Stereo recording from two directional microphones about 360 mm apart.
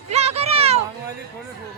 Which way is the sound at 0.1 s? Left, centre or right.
Centre.